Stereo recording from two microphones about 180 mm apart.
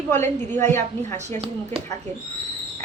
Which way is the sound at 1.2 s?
40° right (ahead or behind).